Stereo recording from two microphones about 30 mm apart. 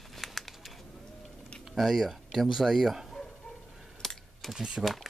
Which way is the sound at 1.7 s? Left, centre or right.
Centre.